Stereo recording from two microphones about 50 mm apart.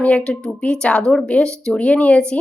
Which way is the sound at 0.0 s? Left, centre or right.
Left.